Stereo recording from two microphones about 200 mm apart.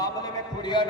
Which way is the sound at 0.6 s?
20° left (ahead or behind).